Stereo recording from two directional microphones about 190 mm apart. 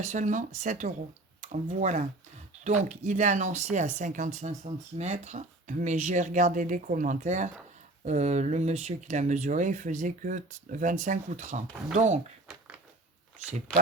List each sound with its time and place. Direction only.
0.0 s speech: 40° right (ahead or behind)